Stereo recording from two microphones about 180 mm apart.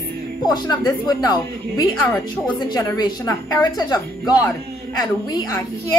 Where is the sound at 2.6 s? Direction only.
20° left (ahead or behind).